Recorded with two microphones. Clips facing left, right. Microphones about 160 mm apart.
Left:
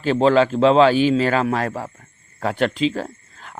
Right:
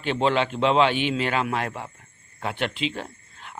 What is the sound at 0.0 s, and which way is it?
Speech, 35° left (ahead or behind).